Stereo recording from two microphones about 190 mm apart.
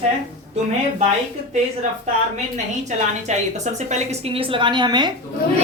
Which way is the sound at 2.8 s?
40° right (ahead or behind).